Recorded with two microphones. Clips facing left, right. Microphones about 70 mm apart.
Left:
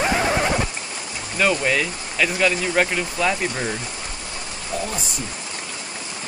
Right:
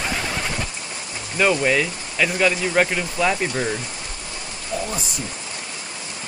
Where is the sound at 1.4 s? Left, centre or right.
Centre.